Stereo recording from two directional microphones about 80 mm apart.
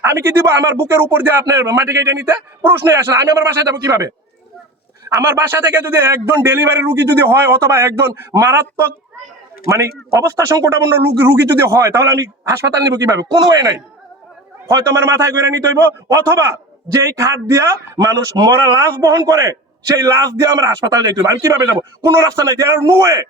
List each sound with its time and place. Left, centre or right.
0.0 s a man's voice: right
14.7 s a man's voice: right